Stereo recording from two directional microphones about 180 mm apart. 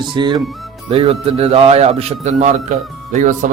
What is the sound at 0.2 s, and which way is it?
A man's voice, 25° right (ahead or behind).